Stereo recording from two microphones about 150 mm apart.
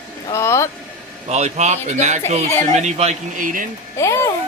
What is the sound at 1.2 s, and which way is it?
Speech, 45° right (ahead or behind).